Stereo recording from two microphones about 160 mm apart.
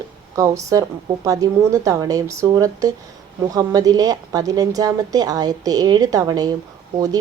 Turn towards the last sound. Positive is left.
turn(degrees=-25)  # may be behind; listen again after turning